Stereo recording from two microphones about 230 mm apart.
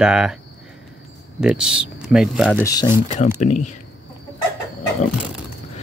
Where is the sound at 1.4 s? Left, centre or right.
Centre.